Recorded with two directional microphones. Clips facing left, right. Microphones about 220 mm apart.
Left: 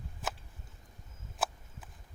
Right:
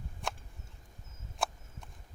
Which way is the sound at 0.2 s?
Centre (ahead or behind).